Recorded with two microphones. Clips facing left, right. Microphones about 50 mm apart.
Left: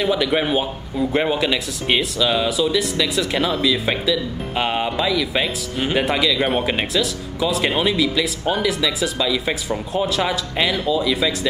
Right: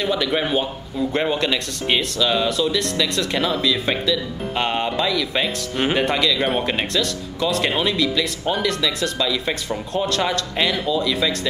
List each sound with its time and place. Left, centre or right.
0.0 s speech: centre